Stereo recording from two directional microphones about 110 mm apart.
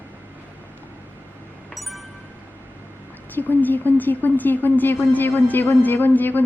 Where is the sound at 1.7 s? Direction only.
Centre (ahead or behind).